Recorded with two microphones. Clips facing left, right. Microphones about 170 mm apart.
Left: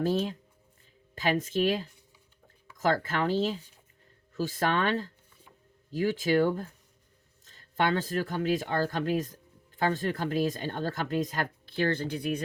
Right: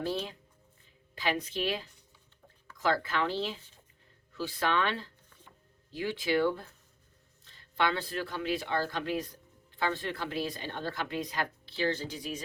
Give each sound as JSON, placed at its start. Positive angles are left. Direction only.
{"t": 0.0, "sound": "speech", "side_deg": 45}